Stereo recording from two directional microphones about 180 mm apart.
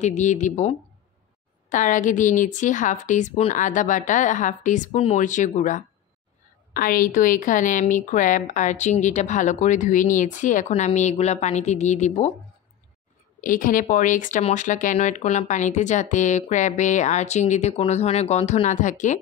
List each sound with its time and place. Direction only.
0.0 s speech: 40° left (ahead or behind)
13.4 s speech: 50° left (ahead or behind)